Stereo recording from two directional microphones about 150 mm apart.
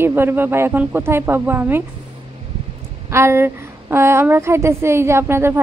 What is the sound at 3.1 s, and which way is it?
A woman's voice, 15° right (ahead or behind).